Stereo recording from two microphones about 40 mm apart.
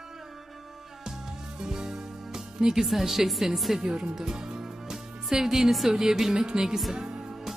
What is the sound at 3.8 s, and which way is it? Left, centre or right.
Speech, centre.